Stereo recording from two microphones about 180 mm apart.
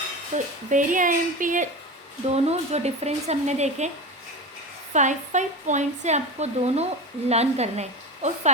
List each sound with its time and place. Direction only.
0.3 s a woman's voice: 45° right (ahead or behind)
4.9 s a woman's voice: 40° right (ahead or behind)